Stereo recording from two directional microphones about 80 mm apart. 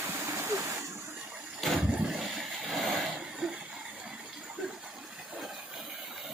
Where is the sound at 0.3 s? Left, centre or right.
Right.